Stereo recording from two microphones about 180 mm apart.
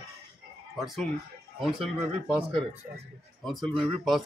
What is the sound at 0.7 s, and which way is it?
Speech, centre (ahead or behind).